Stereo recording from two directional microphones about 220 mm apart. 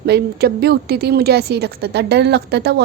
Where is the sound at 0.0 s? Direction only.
45° right (ahead or behind).